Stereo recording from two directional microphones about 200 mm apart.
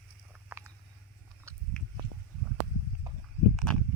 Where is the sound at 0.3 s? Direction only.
10° right (ahead or behind).